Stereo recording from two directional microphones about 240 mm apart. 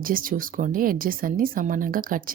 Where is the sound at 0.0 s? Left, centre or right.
Right.